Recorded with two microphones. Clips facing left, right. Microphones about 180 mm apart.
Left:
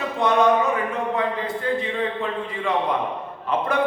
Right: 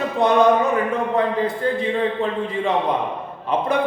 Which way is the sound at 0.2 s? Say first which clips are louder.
Right 3 dB; 35° right (ahead or behind).